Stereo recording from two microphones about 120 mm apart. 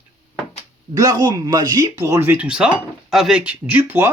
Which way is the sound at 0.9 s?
30° right (ahead or behind).